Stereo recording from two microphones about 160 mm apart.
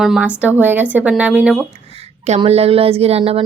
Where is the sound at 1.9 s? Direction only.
40° right (ahead or behind).